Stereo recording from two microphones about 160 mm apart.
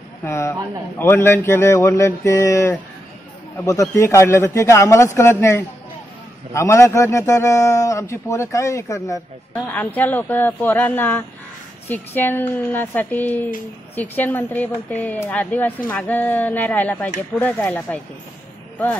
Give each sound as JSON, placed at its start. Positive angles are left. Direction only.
{"t": 0.2, "sound": "a woman's voice", "side_deg": 15}